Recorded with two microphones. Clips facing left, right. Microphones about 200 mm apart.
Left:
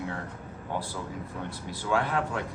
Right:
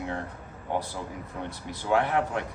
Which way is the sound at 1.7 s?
20° right (ahead or behind).